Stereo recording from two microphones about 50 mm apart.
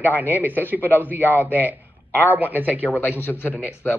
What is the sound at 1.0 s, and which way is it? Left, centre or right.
A man's voice, right.